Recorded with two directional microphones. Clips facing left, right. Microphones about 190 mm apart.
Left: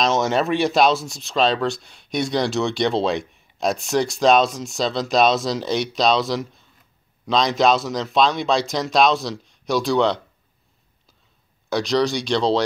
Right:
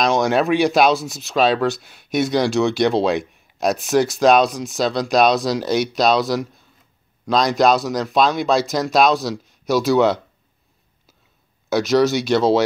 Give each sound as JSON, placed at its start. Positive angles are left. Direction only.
{"t": 0.0, "sound": "speech", "side_deg": 0}
{"t": 11.7, "sound": "speech", "side_deg": -5}